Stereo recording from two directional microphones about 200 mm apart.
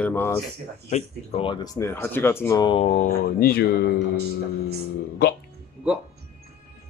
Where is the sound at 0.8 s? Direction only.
30° left (ahead or behind).